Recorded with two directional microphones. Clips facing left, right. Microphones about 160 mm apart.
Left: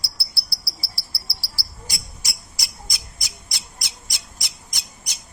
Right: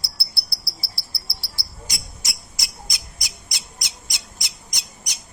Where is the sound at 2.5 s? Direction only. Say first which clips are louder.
Right 1 dB; 20° right (ahead or behind).